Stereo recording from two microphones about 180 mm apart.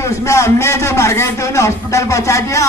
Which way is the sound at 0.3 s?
15° left (ahead or behind).